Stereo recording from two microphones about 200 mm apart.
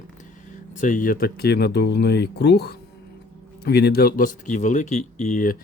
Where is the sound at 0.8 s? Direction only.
40° left (ahead or behind).